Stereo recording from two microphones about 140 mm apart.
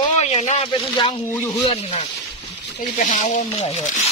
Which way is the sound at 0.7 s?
35° left (ahead or behind).